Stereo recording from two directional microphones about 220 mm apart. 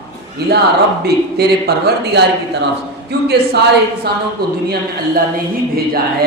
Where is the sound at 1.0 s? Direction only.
45° right (ahead or behind).